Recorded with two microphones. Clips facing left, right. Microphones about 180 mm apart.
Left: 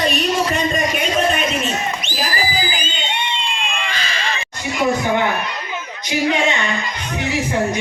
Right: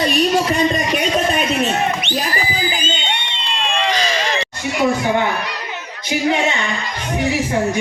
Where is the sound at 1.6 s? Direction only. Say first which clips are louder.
Right 4 dB; 65° right (ahead or behind).